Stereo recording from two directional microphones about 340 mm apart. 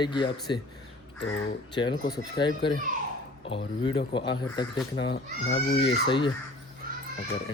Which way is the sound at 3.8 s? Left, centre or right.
Centre.